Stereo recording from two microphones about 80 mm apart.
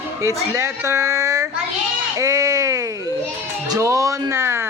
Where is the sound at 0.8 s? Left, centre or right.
Right.